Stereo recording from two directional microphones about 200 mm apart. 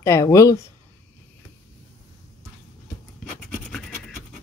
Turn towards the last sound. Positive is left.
turn(degrees=0)  # may be behind; listen again after turning